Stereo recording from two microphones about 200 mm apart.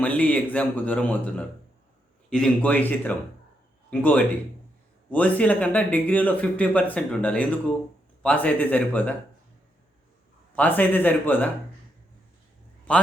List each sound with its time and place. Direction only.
0.0 s speech: 5° left (ahead or behind)
10.5 s speech: 10° left (ahead or behind)
12.9 s a man's voice: 5° left (ahead or behind)